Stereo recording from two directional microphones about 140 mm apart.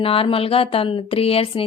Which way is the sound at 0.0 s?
40° left (ahead or behind).